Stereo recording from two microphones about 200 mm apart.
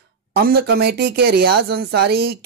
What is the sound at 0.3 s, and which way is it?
Speech, 50° right (ahead or behind).